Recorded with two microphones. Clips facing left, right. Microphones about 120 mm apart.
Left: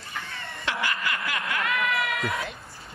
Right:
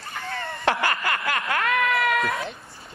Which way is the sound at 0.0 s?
65° right (ahead or behind).